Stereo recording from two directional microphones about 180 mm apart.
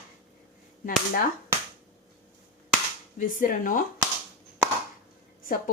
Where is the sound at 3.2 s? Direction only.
50° left (ahead or behind).